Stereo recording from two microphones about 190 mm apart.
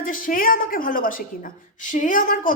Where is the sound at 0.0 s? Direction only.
45° left (ahead or behind).